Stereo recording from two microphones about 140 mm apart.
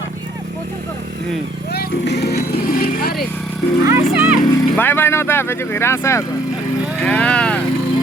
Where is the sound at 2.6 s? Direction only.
90° left.